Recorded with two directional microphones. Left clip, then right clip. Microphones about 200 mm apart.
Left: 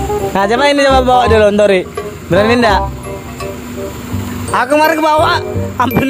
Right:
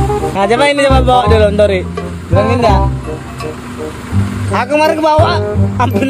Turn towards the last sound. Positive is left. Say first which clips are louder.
# even
turn(degrees=35)  # may be behind; listen again after turning